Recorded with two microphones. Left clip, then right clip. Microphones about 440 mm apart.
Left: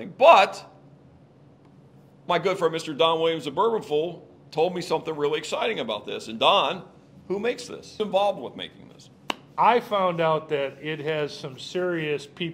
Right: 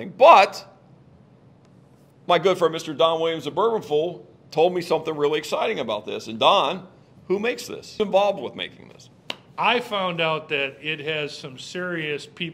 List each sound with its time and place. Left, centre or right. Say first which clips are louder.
0.0 s a man's voice: right 3 dB; right
2.2 s a man's voice: right 4 dB; right
9.6 s a man's voice: left 2 dB; centre